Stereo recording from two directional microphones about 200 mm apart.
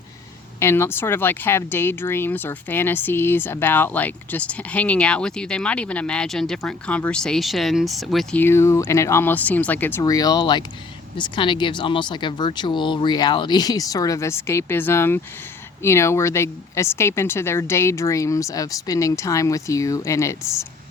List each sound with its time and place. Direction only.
0.6 s speech: 10° left (ahead or behind)